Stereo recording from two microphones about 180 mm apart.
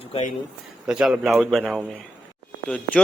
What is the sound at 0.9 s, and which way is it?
A man's voice, centre (ahead or behind).